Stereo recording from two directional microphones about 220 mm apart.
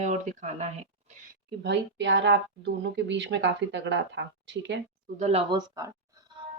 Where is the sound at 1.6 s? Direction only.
55° right (ahead or behind).